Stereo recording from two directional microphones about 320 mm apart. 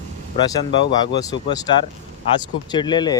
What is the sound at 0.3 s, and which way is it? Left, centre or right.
Speech, centre.